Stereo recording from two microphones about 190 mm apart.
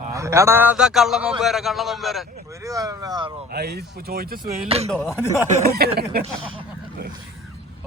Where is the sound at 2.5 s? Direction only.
15° right (ahead or behind).